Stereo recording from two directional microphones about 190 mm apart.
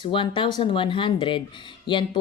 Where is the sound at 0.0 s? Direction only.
25° left (ahead or behind).